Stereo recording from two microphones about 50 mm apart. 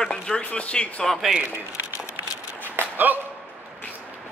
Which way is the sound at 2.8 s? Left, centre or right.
Right.